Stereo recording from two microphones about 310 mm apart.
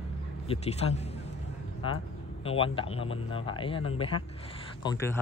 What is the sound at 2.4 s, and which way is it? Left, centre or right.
Speech, centre.